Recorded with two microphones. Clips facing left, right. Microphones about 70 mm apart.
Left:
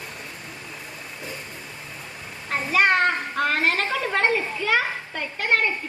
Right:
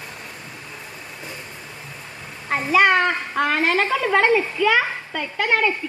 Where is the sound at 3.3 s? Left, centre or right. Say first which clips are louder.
Right 3 dB; right.